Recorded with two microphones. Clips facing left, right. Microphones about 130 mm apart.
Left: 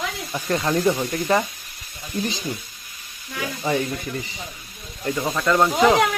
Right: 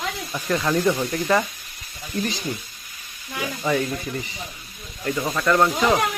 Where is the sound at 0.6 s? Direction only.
20° left (ahead or behind).